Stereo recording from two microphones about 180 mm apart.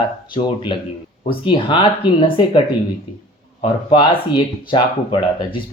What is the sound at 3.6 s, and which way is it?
Speech, 25° left (ahead or behind).